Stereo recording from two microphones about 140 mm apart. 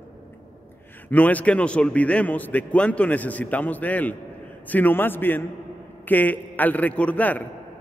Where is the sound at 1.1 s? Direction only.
10° left (ahead or behind).